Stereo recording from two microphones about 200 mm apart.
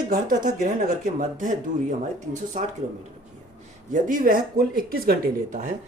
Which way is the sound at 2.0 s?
35° right (ahead or behind).